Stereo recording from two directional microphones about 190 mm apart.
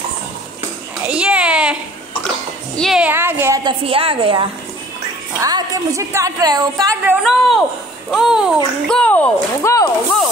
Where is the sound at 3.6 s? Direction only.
30° right (ahead or behind).